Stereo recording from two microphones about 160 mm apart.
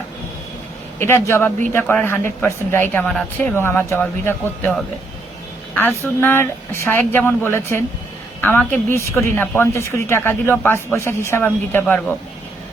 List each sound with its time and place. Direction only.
0.9 s speech: 15° left (ahead or behind)